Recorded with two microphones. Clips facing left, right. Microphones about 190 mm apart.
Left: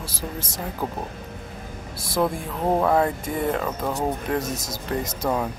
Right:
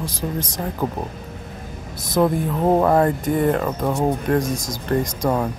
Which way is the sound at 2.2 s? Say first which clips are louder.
Right 6 dB; 5° right (ahead or behind).